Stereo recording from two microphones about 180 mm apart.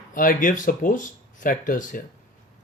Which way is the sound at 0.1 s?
50° left (ahead or behind).